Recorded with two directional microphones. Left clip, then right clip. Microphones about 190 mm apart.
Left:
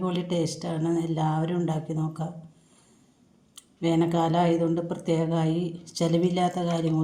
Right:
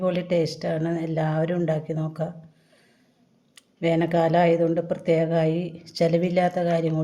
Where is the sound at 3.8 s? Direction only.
45° right (ahead or behind).